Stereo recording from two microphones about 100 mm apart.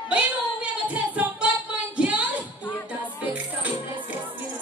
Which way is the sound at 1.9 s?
15° right (ahead or behind).